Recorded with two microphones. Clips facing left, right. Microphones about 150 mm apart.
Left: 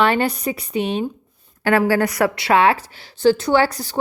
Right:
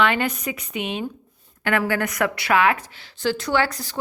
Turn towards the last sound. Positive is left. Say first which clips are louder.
# left 5 dB
turn(degrees=30)  # may be behind; listen again after turning